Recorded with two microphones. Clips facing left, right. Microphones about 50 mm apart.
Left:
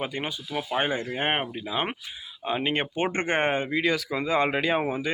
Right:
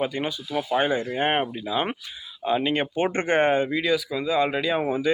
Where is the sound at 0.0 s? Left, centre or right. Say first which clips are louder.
Right 4 dB; left.